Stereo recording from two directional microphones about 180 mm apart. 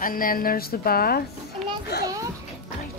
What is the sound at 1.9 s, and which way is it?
Children playing, 65° left (ahead or behind).